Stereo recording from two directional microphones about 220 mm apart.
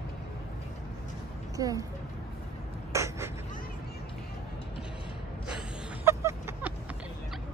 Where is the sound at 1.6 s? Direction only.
15° right (ahead or behind).